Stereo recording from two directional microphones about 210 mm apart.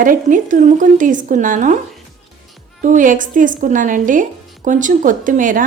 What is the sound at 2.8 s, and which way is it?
A woman's voice, 40° right (ahead or behind).